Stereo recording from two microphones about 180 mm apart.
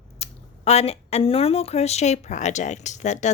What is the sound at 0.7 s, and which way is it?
Speech, 35° left (ahead or behind).